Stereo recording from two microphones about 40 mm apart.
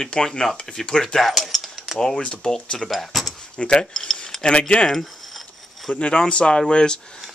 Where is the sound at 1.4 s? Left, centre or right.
Centre.